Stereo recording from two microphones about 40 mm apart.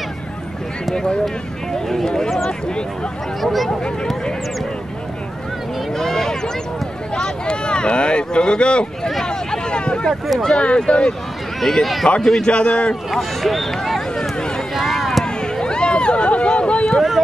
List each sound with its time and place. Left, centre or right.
0.9 s speech: left
1.7 s speech: centre
3.3 s speech: centre
5.9 s a sound: centre
7.2 s speech: left
9.2 s a sound: centre
10.0 s speech: centre
10.6 s speech: left
11.6 s speech: centre
12.4 s speech: left
13.1 s speech: centre
14.8 s run: centre
15.6 s a sound: left